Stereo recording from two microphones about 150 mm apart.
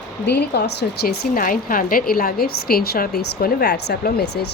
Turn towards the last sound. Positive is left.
turn(degrees=90)